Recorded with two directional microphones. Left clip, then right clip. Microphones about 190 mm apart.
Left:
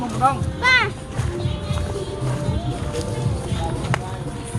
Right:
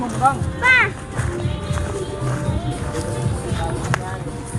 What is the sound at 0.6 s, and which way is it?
Speech, 65° left (ahead or behind).